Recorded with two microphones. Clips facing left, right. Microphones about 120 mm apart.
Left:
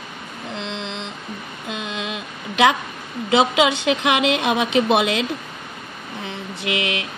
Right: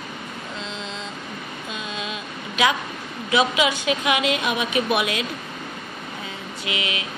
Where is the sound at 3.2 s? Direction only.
70° left (ahead or behind).